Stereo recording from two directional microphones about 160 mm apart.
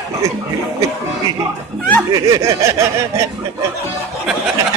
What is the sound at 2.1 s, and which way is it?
Snicker, 20° right (ahead or behind).